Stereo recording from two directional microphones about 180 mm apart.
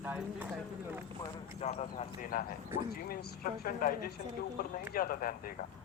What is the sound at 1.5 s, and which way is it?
Speech, 40° left (ahead or behind).